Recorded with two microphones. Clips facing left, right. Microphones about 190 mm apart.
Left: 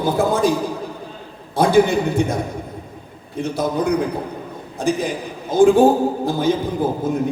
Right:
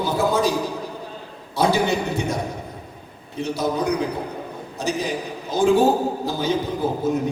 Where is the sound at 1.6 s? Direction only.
50° left (ahead or behind).